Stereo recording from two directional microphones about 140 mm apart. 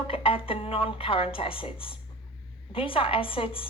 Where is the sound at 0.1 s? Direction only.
40° left (ahead or behind).